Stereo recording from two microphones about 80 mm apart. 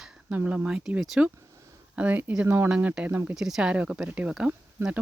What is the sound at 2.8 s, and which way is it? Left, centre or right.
Speech, centre.